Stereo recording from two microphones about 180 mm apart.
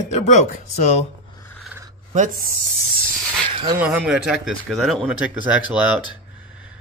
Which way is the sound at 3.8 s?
5° right (ahead or behind).